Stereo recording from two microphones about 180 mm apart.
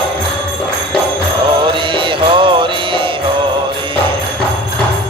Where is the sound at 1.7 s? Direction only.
30° right (ahead or behind).